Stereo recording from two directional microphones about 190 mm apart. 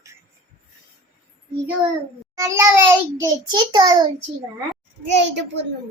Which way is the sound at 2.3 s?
15° right (ahead or behind).